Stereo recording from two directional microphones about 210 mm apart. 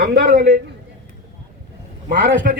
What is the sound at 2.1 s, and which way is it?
Speech, 60° right (ahead or behind).